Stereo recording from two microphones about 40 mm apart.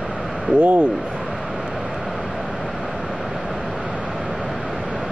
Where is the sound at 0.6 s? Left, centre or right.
Right.